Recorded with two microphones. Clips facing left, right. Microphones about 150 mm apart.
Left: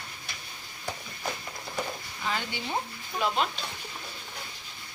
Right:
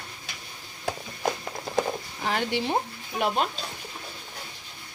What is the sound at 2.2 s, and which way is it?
Speech, 75° right (ahead or behind).